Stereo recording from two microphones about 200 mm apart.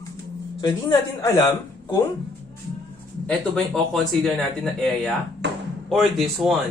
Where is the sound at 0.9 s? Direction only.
20° left (ahead or behind).